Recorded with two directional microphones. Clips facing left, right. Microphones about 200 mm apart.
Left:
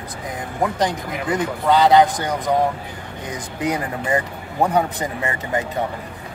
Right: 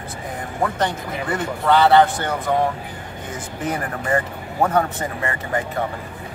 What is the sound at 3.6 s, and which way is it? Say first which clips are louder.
A man's voice: left 2 dB; 15° left (ahead or behind).